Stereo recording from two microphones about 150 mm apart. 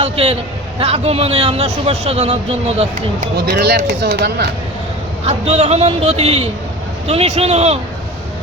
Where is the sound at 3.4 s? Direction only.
90° right.